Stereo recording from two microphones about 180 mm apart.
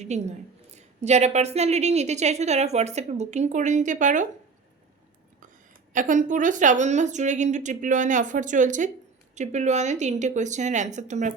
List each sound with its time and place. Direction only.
0.0 s a woman's voice: 40° right (ahead or behind)
5.9 s a woman's voice: 45° right (ahead or behind)